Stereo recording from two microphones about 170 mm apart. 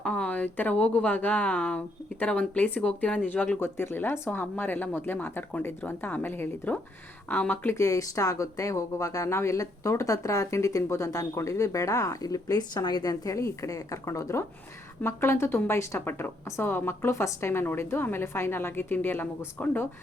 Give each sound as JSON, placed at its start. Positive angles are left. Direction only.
{"t": 0.0, "sound": "speech", "side_deg": 5}